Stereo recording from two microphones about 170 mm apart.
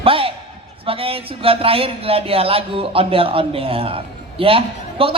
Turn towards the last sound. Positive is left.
turn(degrees=-30)  # may be behind; listen again after turning